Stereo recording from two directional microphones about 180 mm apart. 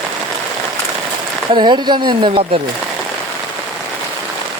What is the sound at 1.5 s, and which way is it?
Speech, 25° right (ahead or behind).